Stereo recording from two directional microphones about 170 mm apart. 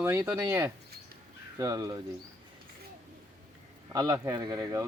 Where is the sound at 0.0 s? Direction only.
15° right (ahead or behind).